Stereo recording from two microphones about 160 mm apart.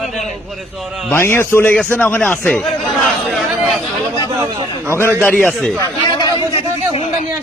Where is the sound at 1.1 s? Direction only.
15° left (ahead or behind).